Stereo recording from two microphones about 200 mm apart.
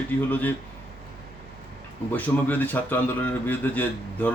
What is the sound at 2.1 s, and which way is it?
Speech, 10° left (ahead or behind).